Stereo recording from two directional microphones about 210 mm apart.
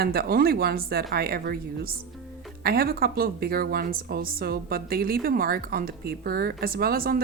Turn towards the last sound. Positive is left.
turn(degrees=-45)  # may be behind; listen again after turning